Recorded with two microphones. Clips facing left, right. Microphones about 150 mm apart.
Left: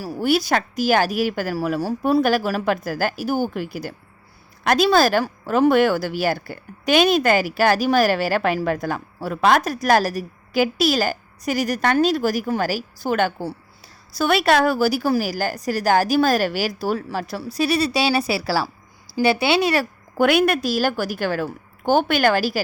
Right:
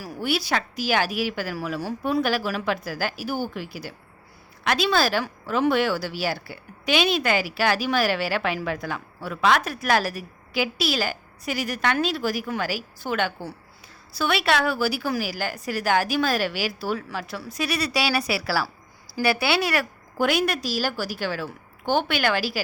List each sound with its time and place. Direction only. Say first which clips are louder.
0.0 s a woman's voice: left 7 dB; 45° left (ahead or behind); by 19.8 s 20° left (ahead or behind)
20.1 s speech: left 6 dB; 60° left (ahead or behind); by 22.6 s 45° left (ahead or behind)